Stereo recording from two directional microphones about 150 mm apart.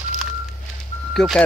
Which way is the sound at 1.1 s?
5° left (ahead or behind).